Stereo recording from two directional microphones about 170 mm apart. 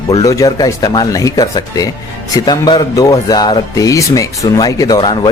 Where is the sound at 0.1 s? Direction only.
20° left (ahead or behind).